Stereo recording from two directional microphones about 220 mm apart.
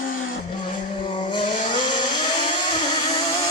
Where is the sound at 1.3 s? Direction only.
20° left (ahead or behind).